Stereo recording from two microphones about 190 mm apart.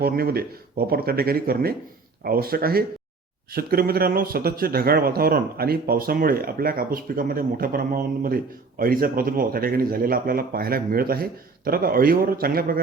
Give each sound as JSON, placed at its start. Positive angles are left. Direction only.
{"t": 0.0, "sound": "speech", "side_deg": -55}